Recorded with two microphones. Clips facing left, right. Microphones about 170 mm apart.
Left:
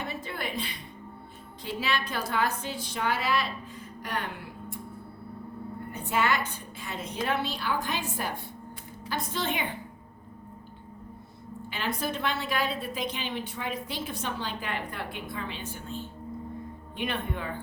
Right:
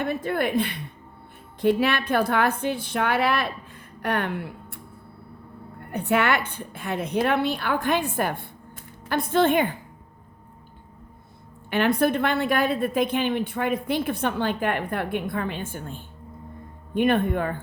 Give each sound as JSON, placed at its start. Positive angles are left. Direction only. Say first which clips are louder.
{"t": 0.0, "sound": "a woman's voice", "louder": "right 10 dB", "side_deg": -55}
{"t": 5.9, "sound": "a woman's voice", "louder": "right 6 dB", "side_deg": -65}
{"t": 11.7, "sound": "a woman's voice", "louder": "right 11 dB", "side_deg": -60}